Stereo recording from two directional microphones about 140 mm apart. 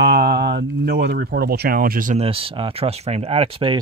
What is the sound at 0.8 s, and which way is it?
Speech, 90° right.